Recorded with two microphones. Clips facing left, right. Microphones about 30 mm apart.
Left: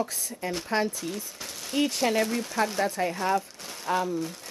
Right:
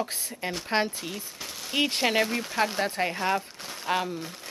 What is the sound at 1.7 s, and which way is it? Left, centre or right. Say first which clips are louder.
Speech: even; right.